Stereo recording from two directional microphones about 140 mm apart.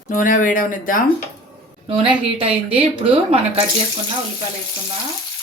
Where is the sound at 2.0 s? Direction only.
40° right (ahead or behind).